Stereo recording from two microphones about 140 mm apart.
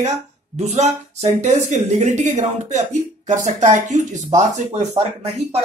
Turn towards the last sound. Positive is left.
turn(degrees=-50)  # may be behind; listen again after turning